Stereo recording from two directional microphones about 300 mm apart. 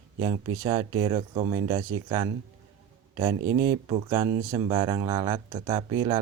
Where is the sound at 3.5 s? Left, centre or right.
Centre.